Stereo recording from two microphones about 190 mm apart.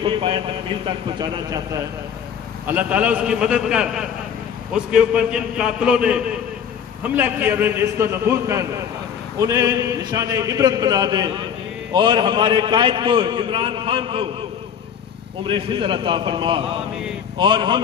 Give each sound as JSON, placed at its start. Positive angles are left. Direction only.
{"t": 0.0, "sound": "a man's voice", "side_deg": -25}
{"t": 2.6, "sound": "a man's voice", "side_deg": -10}
{"t": 15.4, "sound": "a man's voice", "side_deg": -25}